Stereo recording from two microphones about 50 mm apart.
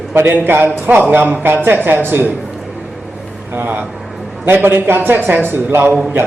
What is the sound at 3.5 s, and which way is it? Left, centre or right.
A man's voice, right.